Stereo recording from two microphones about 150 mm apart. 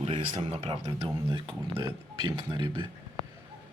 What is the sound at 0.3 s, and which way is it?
Speech, 45° right (ahead or behind).